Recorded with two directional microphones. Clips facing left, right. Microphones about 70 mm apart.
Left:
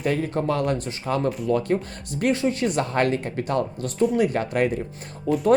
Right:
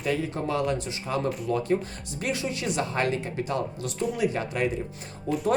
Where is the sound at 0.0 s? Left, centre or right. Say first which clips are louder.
Left 4 dB; left.